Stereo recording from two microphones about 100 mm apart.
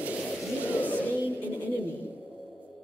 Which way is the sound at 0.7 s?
20° left (ahead or behind).